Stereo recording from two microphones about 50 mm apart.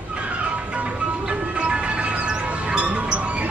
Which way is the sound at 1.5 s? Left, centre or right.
Right.